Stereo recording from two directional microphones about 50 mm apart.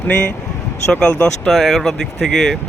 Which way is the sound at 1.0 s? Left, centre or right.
Centre.